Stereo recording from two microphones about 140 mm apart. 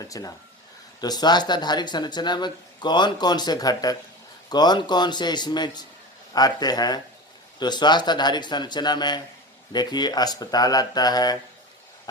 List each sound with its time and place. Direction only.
0.1 s speech: 25° left (ahead or behind)